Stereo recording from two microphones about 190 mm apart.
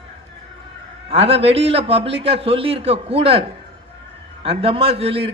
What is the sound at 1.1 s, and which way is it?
A man's voice, 30° right (ahead or behind).